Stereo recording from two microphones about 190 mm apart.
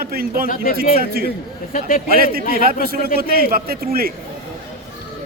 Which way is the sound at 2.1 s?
50° right (ahead or behind).